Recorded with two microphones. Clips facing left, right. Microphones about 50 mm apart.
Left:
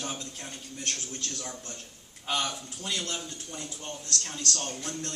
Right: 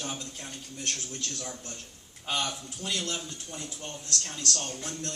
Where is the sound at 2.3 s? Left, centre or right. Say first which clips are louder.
Left 1 dB; centre.